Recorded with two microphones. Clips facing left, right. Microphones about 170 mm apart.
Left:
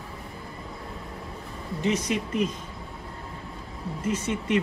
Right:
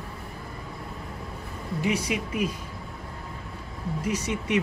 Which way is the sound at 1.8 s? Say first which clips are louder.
Left 1 dB; 10° right (ahead or behind).